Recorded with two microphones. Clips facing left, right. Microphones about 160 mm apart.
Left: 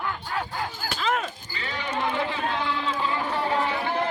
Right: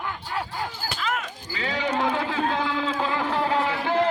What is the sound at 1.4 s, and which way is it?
A man's voice, 90° right.